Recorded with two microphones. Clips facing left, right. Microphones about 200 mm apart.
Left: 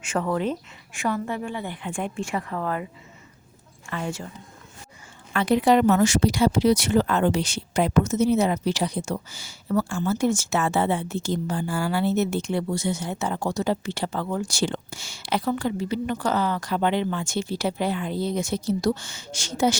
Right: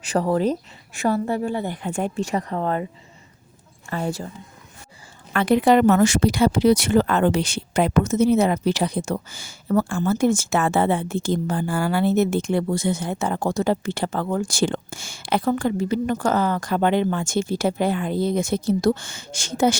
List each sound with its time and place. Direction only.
0.0 s a woman's voice: 35° right (ahead or behind)
3.8 s a woman's voice: 40° right (ahead or behind)
5.3 s speech: 55° right (ahead or behind)